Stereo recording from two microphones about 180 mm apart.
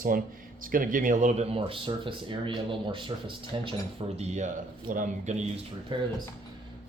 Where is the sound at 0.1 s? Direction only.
50° right (ahead or behind); by 3.8 s 30° right (ahead or behind).